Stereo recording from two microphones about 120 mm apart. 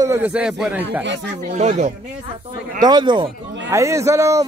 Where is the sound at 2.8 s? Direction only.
35° right (ahead or behind).